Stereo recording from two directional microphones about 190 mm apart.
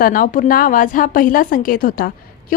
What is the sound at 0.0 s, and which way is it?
A woman's voice, 45° left (ahead or behind).